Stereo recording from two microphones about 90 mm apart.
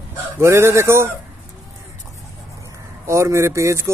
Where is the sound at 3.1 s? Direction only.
30° right (ahead or behind).